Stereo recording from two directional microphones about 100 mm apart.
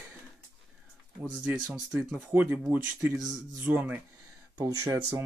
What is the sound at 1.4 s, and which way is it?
Speech, 15° right (ahead or behind).